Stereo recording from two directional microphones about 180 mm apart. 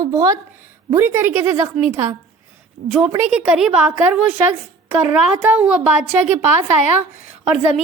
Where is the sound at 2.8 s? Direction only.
60° right (ahead or behind).